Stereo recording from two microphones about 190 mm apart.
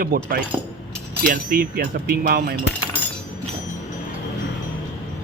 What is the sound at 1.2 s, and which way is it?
Speech, 50° right (ahead or behind).